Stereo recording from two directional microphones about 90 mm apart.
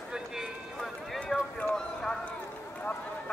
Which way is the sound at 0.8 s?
5° left (ahead or behind).